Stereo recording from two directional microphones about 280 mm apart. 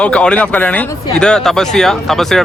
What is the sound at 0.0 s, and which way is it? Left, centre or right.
Speech, centre.